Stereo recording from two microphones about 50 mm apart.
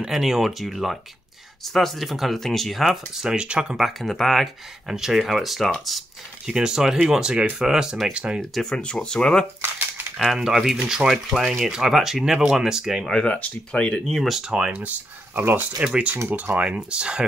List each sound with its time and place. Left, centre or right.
0.1 s speech: centre
2.8 s speech: centre
3.7 s speech: centre
6.4 s speech: centre
8.7 s speech: centre
10.1 s speech: centre
13.3 s speech: left
14.0 s speech: centre
14.3 s speech: centre
14.7 s speech: right
16.3 s speech: right
16.5 s speech: right